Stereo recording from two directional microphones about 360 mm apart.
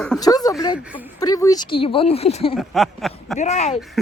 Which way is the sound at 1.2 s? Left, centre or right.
Centre.